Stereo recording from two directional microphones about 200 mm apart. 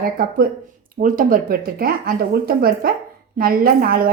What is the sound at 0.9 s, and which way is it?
Speech, 45° right (ahead or behind).